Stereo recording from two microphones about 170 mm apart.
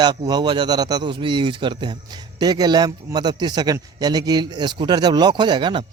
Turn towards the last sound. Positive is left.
turn(degrees=-30)  # may be behind; listen again after turning